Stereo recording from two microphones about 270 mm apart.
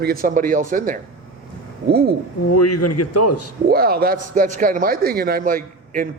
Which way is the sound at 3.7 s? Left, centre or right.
Right.